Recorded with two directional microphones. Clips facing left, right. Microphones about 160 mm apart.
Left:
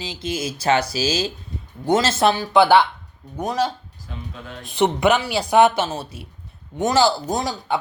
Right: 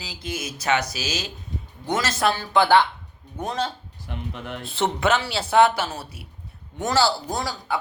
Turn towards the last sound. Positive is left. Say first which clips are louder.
# left 4 dB
turn(degrees=20)  # may be behind; listen again after turning